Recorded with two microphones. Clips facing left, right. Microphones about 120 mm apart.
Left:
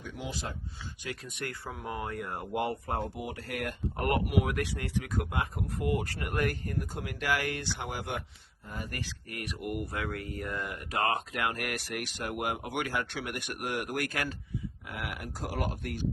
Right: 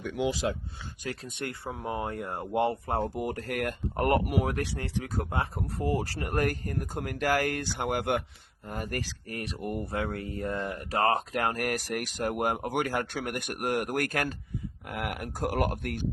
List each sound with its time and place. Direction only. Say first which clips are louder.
0.0 s speech: right 10 dB; 75° right (ahead or behind); by 0.5 s 90° right
1.0 s speech: right 3 dB; 30° right (ahead or behind)
3.2 s speech: right 5 dB; 45° right (ahead or behind)
8.7 s speech: right 5 dB; 50° right (ahead or behind)